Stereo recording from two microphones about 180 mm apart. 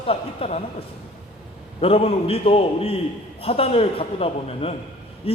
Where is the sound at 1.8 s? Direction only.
30° left (ahead or behind).